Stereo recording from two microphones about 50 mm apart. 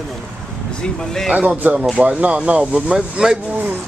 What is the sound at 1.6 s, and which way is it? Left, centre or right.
Speech, right.